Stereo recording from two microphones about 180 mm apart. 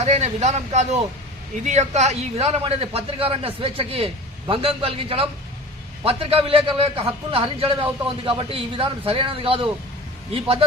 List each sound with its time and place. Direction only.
0.0 s a man's voice: 40° right (ahead or behind)